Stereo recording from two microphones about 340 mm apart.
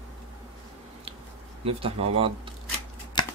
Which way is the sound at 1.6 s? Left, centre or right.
Centre.